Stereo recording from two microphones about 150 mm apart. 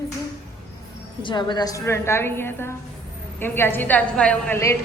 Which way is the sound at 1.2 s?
30° left (ahead or behind).